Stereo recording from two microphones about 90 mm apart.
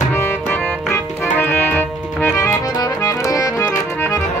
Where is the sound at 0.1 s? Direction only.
25° left (ahead or behind).